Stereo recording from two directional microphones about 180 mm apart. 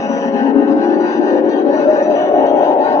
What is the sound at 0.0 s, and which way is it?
Music, 15° left (ahead or behind).